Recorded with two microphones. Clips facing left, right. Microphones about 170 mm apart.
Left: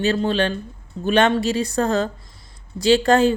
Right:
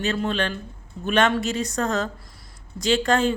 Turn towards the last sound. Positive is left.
turn(degrees=35)  # may be behind; listen again after turning